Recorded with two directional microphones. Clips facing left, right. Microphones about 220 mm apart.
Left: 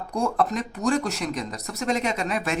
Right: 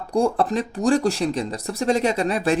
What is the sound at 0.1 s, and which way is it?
Speech, 30° right (ahead or behind).